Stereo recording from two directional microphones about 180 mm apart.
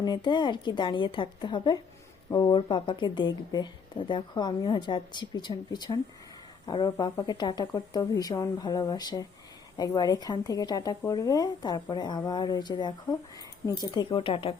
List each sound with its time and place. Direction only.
0.0 s a woman's voice: 25° left (ahead or behind)